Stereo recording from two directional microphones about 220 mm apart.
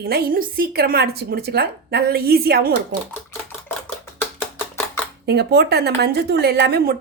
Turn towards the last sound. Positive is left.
turn(degrees=-45)  # may be behind; listen again after turning